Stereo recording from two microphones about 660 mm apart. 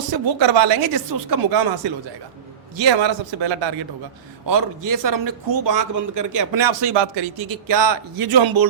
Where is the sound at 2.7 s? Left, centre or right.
Right.